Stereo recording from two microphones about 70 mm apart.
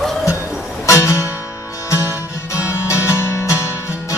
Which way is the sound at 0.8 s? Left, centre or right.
Left.